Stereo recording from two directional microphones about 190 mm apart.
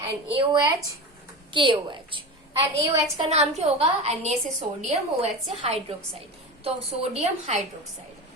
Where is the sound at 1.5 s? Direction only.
25° right (ahead or behind).